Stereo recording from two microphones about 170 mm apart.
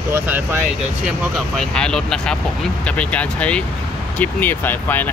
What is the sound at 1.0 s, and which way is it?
Speech, centre (ahead or behind).